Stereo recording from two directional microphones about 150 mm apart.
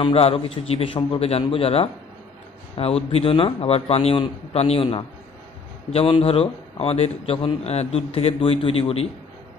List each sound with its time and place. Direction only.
0.0 s a man's voice: 40° left (ahead or behind)